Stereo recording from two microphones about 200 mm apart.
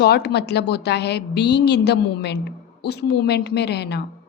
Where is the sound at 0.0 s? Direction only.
55° left (ahead or behind).